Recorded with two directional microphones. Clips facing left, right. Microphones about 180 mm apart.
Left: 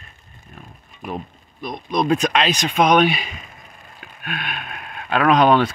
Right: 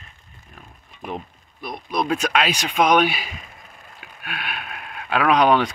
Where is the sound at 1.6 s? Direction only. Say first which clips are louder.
Left 3 dB; 10° right (ahead or behind).